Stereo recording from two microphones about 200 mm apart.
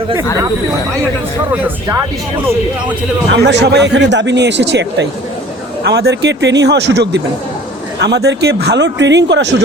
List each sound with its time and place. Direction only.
1.6 s speech: 15° right (ahead or behind)
3.4 s speech: 60° right (ahead or behind)